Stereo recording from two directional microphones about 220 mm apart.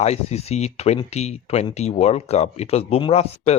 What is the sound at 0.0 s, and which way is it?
Speech, 30° left (ahead or behind).